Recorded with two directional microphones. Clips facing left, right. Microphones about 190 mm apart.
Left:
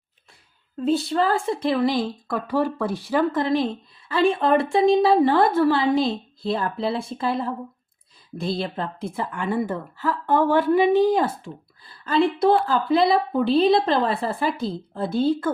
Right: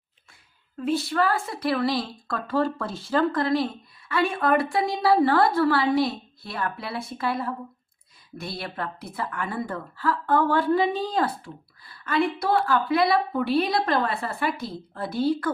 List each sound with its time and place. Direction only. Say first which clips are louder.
1.0 s a woman's voice: left 3 dB; 30° left (ahead or behind)
11.9 s a woman's voice: left 4 dB; 30° left (ahead or behind)